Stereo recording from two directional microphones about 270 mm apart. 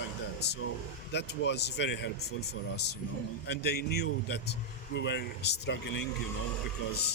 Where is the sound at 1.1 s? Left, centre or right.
Left.